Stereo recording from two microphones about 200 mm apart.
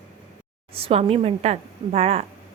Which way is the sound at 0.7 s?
30° right (ahead or behind).